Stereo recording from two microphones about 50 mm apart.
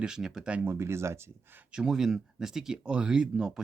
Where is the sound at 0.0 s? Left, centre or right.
Centre.